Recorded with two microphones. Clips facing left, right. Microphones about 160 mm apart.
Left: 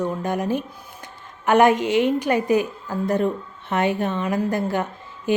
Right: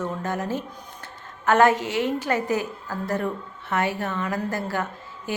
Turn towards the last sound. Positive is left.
turn(degrees=20)  # may be behind; listen again after turning